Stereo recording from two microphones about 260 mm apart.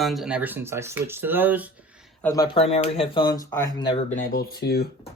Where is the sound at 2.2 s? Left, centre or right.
Centre.